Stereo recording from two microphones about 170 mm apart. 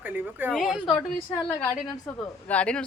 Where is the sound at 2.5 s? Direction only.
5° left (ahead or behind).